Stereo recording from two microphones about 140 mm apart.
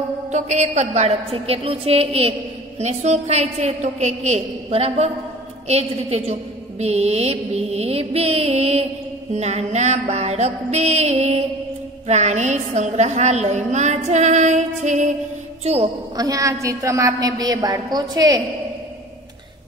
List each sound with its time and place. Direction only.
0.3 s a woman's voice: 55° right (ahead or behind)
2.8 s a woman's voice: 55° right (ahead or behind)
15.6 s a woman's voice: 45° right (ahead or behind)
16.2 s a woman's voice: 25° right (ahead or behind)